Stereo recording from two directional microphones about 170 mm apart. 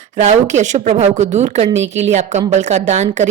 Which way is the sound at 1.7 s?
90° right.